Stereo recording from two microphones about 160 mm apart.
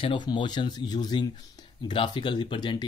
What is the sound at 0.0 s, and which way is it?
Speech, 30° left (ahead or behind).